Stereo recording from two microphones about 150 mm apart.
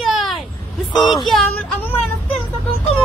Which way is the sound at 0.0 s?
Centre (ahead or behind).